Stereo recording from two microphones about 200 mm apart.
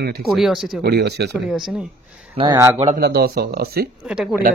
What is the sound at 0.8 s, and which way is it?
Speech, 55° right (ahead or behind).